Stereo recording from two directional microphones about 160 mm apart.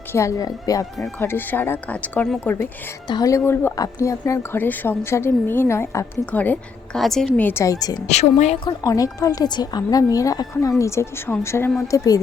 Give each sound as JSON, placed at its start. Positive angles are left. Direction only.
{"t": 0.1, "sound": "a woman's voice", "side_deg": 20}
{"t": 8.0, "sound": "a woman's voice", "side_deg": 45}
{"t": 8.6, "sound": "speech", "side_deg": 20}